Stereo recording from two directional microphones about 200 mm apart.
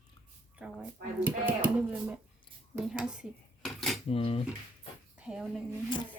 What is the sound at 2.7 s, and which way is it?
Speech, 5° right (ahead or behind).